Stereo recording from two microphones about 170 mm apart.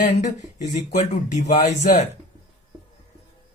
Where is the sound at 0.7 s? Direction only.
45° left (ahead or behind).